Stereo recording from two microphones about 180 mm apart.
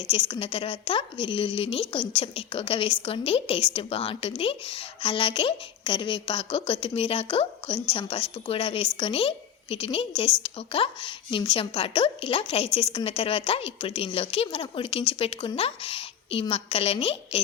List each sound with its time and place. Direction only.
0.1 s a woman's voice: 30° left (ahead or behind)